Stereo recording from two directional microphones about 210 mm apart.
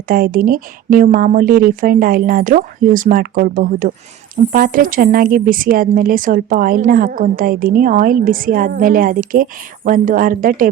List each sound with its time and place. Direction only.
0.1 s a woman's voice: 40° right (ahead or behind)